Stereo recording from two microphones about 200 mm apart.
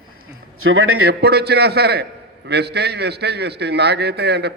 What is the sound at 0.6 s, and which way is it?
Speech, 90° right.